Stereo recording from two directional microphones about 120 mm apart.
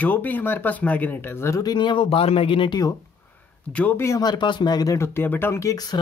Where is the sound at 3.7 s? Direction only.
10° left (ahead or behind).